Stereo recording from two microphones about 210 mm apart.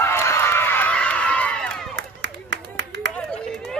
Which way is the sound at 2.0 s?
60° right (ahead or behind).